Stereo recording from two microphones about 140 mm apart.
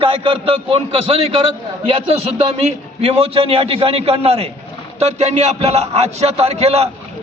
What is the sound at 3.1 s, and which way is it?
A man's voice, 40° right (ahead or behind).